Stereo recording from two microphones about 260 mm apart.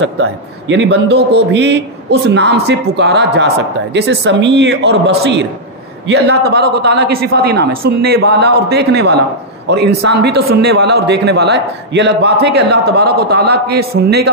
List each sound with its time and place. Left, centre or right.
0.0 s a man's voice: right